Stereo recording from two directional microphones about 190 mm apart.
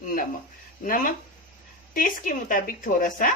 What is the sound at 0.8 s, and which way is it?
A woman's voice, 45° left (ahead or behind).